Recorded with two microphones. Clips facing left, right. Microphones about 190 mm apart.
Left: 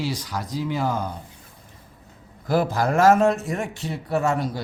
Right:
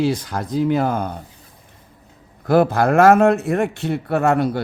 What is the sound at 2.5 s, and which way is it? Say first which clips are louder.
A man's voice: right 6 dB; 60° right (ahead or behind).